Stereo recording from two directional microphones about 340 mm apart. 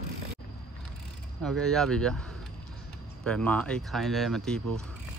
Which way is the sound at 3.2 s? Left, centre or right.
Centre.